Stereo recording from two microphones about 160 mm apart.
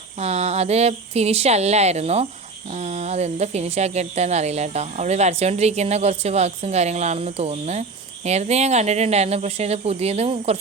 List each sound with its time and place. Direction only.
0.2 s a woman's voice: 40° right (ahead or behind)